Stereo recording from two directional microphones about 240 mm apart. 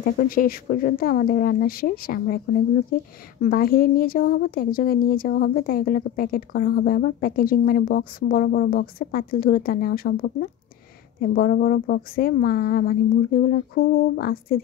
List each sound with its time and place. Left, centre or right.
0.0 s a woman's voice: left